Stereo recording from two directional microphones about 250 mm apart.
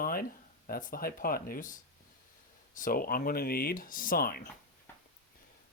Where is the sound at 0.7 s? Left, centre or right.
Left.